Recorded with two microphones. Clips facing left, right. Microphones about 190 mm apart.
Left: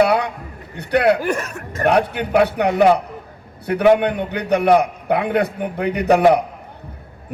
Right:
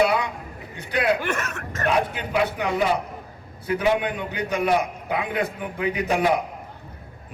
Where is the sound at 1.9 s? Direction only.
65° left (ahead or behind).